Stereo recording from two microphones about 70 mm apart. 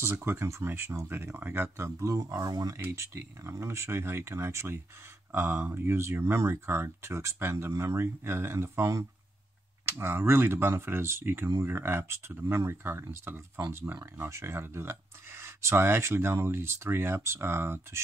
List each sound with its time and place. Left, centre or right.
0.0 s speech: right
2.3 s speech: right
2.8 s speech: right
9.8 s speech: right